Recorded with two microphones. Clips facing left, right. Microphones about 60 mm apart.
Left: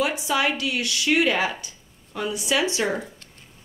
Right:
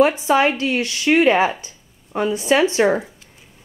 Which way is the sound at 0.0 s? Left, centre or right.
Right.